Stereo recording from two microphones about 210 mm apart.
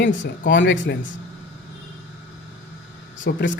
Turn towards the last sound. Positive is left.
turn(degrees=55)  # may be behind; listen again after turning